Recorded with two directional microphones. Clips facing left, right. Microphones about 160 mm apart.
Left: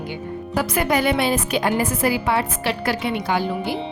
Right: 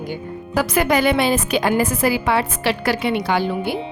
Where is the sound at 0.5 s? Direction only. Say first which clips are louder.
Right 3 dB; 90° right.